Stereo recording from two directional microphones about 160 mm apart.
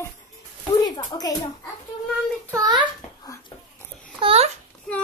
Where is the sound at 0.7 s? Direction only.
25° left (ahead or behind).